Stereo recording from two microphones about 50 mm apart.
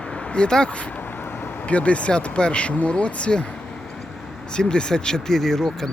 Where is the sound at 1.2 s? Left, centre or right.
Left.